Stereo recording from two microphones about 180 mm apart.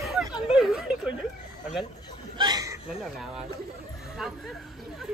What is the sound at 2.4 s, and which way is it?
Chuckle, 20° right (ahead or behind).